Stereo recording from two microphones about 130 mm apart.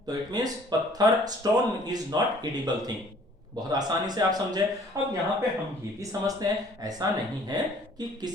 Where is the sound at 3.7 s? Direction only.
30° right (ahead or behind).